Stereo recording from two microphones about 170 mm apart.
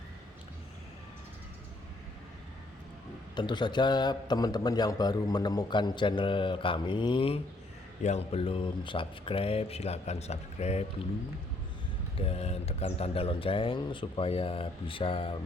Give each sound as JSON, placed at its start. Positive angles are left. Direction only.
{"t": 3.3, "sound": "a man's voice", "side_deg": 25}
{"t": 12.2, "sound": "speech", "side_deg": 40}